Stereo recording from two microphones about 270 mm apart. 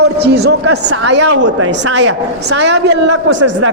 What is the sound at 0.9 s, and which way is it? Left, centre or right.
A man's voice, right.